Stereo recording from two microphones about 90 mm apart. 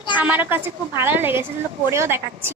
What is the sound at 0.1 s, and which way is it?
A woman's voice, 20° right (ahead or behind).